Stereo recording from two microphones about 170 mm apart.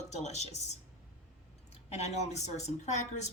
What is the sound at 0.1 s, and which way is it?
Speech, 40° left (ahead or behind).